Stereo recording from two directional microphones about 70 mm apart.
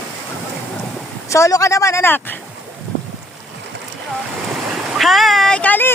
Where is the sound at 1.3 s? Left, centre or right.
Left.